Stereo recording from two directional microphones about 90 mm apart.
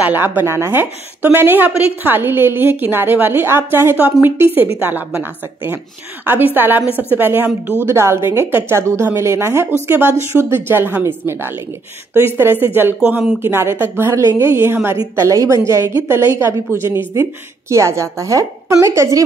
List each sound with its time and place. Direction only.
0.0 s a woman's voice: 20° right (ahead or behind)
7.8 s a woman's voice: 30° right (ahead or behind)